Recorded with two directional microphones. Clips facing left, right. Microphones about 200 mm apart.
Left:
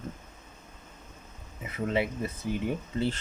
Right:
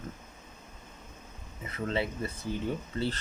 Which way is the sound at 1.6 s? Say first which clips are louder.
Left 3 dB; 15° left (ahead or behind).